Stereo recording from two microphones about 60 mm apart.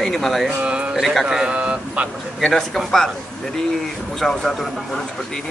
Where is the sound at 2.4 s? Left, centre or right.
Centre.